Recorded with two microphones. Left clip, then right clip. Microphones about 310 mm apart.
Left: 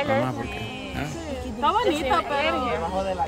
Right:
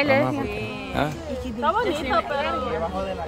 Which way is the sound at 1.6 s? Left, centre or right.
Left.